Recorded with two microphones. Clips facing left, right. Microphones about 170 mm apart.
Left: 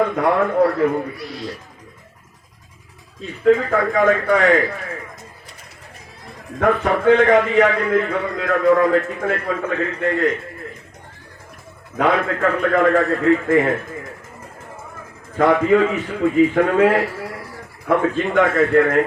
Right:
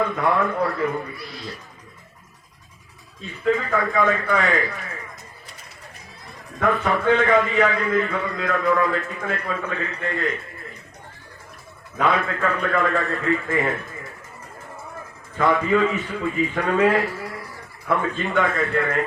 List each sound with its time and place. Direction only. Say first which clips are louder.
0.0 s a man's voice: left 4 dB; 40° left (ahead or behind)
3.4 s a man's voice: left 6 dB; 50° left (ahead or behind)
6.6 s a man's voice: left 4 dB; 50° left (ahead or behind)
7.4 s a man's voice: left 5 dB; 40° left (ahead or behind)
7.7 s a man's voice: left 4 dB; 55° left (ahead or behind)
12.0 s a man's voice: left 4 dB; 50° left (ahead or behind)
15.4 s a man's voice: left 5 dB; 55° left (ahead or behind)